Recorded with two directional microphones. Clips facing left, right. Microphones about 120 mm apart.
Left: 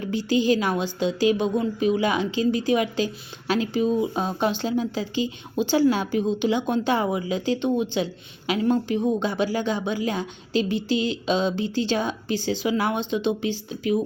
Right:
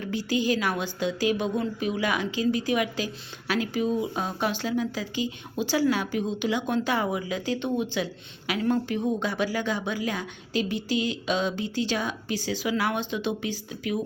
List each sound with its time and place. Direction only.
0.0 s a woman's voice: 25° left (ahead or behind)